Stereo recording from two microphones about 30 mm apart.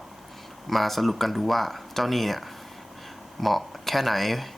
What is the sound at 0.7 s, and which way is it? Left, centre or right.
Speech, centre.